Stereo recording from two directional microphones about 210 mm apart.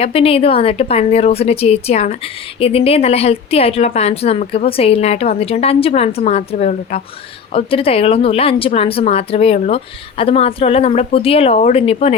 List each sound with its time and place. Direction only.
0.0 s a woman's voice: 25° left (ahead or behind)